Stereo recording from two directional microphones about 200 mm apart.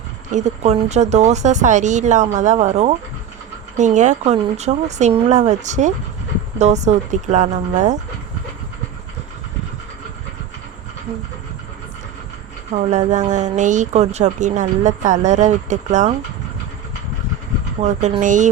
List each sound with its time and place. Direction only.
0.3 s speech: 35° right (ahead or behind)
12.7 s speech: 35° right (ahead or behind)
17.8 s speech: 35° right (ahead or behind)